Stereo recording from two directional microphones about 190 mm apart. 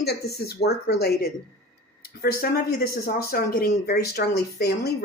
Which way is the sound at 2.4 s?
50° left (ahead or behind).